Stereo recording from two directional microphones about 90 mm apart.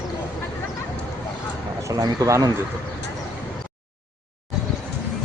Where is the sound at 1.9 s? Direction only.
40° right (ahead or behind).